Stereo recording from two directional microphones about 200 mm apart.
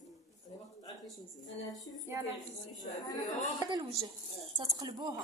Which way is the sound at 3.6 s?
20° right (ahead or behind).